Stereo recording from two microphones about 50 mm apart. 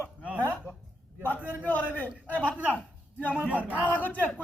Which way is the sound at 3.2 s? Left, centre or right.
Left.